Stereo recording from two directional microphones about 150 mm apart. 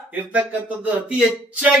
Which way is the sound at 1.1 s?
10° right (ahead or behind).